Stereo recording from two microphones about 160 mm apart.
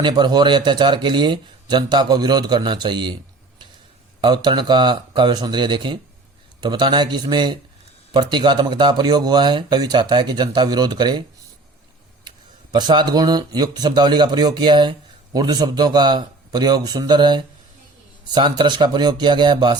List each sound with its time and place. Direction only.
0.0 s speech: 25° right (ahead or behind)
4.2 s speech: 30° right (ahead or behind)
12.7 s speech: 25° right (ahead or behind)